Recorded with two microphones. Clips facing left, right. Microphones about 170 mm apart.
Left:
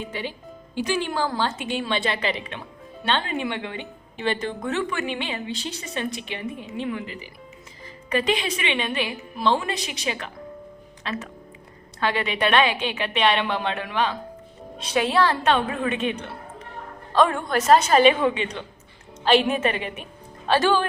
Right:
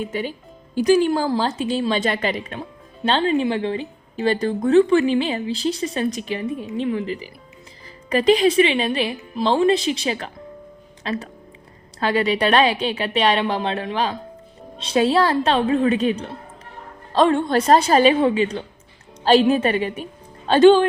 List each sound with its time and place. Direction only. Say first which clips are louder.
0.1 s a woman's voice: right 5 dB; 45° right (ahead or behind)
3.1 s a woman's voice: right 7 dB; 30° right (ahead or behind)
20.5 s speech: right 9 dB; 25° right (ahead or behind)